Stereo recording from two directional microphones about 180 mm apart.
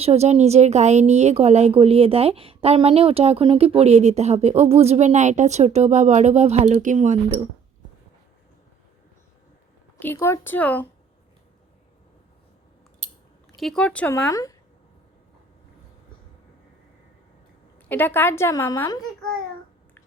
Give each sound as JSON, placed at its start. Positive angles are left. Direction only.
{"t": 0.0, "sound": "a woman's voice", "side_deg": -35}
{"t": 10.0, "sound": "a woman's voice", "side_deg": 15}
{"t": 13.6, "sound": "a woman's voice", "side_deg": 5}
{"t": 14.3, "sound": "a woman's voice", "side_deg": 20}
{"t": 17.8, "sound": "a woman's voice", "side_deg": 10}